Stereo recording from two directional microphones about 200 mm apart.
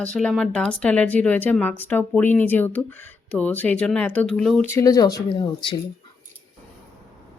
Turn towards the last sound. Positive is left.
turn(degrees=20)  # may be behind; listen again after turning